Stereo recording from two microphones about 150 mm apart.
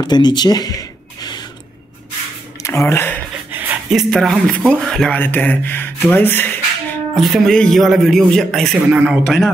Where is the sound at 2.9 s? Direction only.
15° left (ahead or behind).